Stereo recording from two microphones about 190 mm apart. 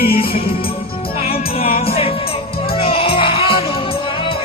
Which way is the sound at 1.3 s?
50° left (ahead or behind).